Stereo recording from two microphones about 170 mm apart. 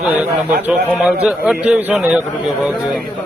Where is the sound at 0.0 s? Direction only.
5° right (ahead or behind).